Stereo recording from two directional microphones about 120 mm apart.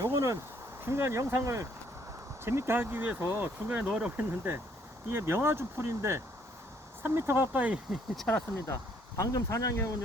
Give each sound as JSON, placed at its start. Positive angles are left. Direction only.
{"t": 0.0, "sound": "a sound", "side_deg": -25}
{"t": 0.9, "sound": "speech", "side_deg": -20}
{"t": 2.4, "sound": "speech", "side_deg": -20}
{"t": 8.1, "sound": "speech", "side_deg": 5}
{"t": 8.6, "sound": "speech", "side_deg": 25}